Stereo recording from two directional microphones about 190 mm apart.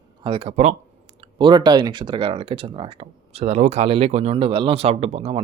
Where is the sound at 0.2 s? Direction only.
25° right (ahead or behind).